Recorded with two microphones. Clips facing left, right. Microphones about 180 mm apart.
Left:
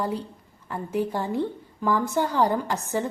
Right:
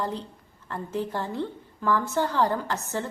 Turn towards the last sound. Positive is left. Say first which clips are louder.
# left 3 dB
turn(degrees=15)  # may be behind; listen again after turning